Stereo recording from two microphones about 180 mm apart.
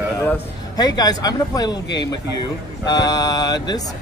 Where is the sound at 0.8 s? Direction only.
20° left (ahead or behind).